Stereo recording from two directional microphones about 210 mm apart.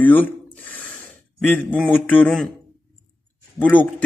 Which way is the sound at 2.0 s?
5° left (ahead or behind).